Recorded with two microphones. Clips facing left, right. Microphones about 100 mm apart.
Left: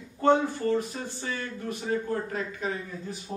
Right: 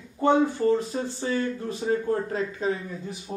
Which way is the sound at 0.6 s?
25° right (ahead or behind).